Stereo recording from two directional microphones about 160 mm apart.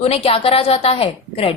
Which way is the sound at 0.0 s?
40° left (ahead or behind).